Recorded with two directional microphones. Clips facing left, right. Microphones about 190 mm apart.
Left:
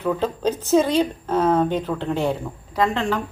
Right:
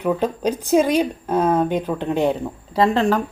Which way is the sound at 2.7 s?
35° right (ahead or behind).